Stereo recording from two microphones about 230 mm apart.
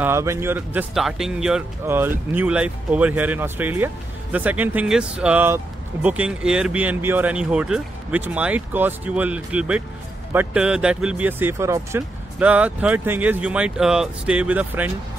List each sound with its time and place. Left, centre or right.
0.0 s speech: centre